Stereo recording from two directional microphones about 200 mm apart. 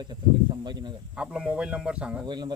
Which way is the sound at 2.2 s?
20° right (ahead or behind).